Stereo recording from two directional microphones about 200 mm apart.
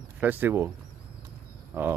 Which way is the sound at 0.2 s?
10° right (ahead or behind).